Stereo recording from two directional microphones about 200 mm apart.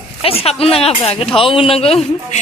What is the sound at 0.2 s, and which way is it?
A woman's voice, 30° left (ahead or behind).